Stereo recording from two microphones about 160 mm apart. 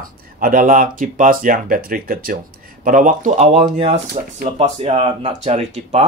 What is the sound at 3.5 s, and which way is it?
Speech, 40° right (ahead or behind).